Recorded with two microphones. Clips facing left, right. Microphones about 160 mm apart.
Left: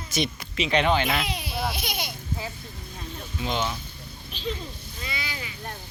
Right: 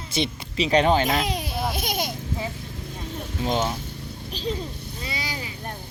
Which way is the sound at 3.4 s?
40° right (ahead or behind).